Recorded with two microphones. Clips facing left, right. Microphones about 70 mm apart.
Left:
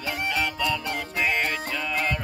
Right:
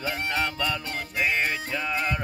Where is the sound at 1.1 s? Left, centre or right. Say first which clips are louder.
Even; centre.